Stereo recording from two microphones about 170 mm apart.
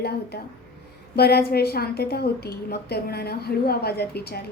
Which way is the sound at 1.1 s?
70° left (ahead or behind).